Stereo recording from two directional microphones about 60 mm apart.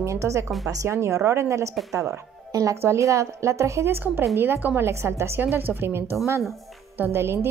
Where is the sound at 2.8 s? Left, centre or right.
Right.